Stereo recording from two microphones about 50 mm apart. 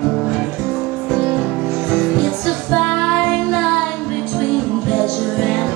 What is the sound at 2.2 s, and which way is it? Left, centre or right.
Music, centre.